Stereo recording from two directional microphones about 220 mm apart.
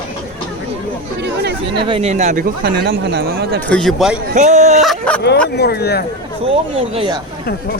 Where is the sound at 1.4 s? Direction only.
50° right (ahead or behind).